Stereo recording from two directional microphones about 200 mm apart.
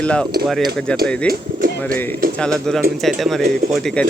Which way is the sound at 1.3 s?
45° right (ahead or behind).